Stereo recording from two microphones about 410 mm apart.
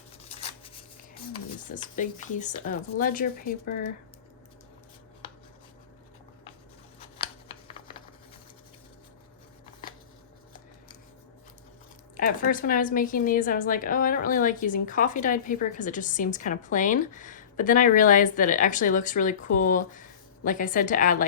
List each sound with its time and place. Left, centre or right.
1.1 s a woman's voice: centre
7.4 s typing: centre
12.1 s a woman's voice: centre